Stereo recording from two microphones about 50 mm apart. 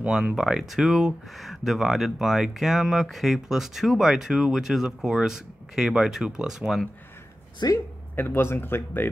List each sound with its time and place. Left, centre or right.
0.1 s speech: centre
8.2 s speech: left